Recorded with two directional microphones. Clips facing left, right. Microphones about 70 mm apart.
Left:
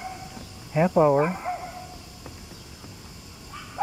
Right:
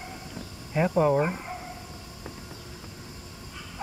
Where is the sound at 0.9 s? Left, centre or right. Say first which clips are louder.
Left 4 dB; centre.